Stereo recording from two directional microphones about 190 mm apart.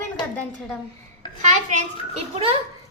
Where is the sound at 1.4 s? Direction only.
40° right (ahead or behind).